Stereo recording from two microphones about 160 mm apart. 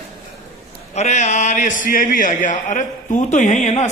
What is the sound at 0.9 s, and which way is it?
A man's voice, 45° left (ahead or behind).